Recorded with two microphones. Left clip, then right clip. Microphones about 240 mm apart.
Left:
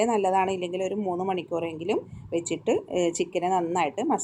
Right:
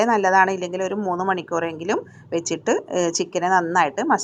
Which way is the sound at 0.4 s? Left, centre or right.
Right.